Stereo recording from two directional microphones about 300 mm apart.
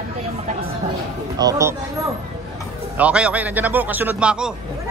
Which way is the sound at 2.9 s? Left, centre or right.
Centre.